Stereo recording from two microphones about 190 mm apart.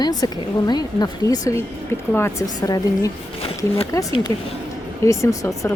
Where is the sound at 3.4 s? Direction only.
30° left (ahead or behind).